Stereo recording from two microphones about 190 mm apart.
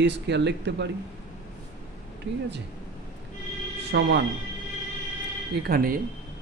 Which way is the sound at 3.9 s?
65° right (ahead or behind).